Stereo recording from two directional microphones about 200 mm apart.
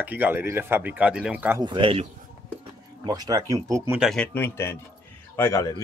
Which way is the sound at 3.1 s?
20° right (ahead or behind).